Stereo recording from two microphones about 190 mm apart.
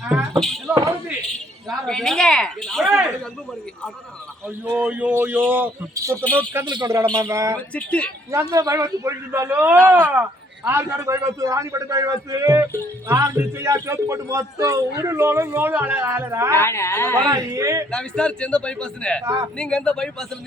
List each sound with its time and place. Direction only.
0.0 s a sound: 10° right (ahead or behind)
0.3 s speech: centre (ahead or behind)
0.7 s a man's voice: 15° right (ahead or behind)
1.9 s speech: 5° left (ahead or behind)
4.7 s a man's voice: 10° right (ahead or behind)
7.5 s speech: 5° left (ahead or behind)
8.3 s a man's voice: 15° right (ahead or behind)
16.6 s speech: 15° left (ahead or behind)
17.2 s a man's voice: 20° right (ahead or behind)
17.9 s speech: 5° left (ahead or behind)
19.2 s a man's voice: 15° right (ahead or behind)
19.5 s speech: 5° left (ahead or behind)